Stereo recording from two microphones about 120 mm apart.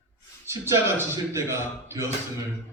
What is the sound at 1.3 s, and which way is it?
Speech, 25° right (ahead or behind).